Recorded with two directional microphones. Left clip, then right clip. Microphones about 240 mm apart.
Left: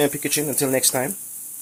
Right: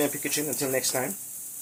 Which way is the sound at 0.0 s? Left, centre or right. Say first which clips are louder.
Left 6 dB; left.